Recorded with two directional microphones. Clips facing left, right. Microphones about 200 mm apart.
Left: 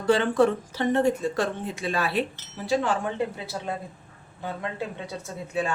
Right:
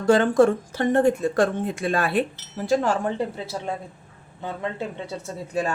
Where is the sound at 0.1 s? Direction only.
45° right (ahead or behind).